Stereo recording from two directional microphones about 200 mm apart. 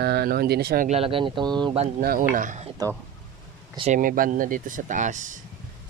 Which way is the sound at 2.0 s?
45° right (ahead or behind).